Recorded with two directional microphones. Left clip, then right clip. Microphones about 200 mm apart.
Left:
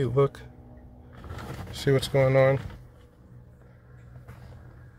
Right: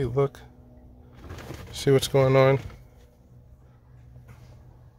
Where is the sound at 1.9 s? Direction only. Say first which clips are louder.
Right 2 dB; 30° right (ahead or behind).